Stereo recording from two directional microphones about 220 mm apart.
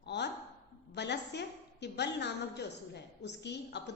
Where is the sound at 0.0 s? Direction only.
50° left (ahead or behind).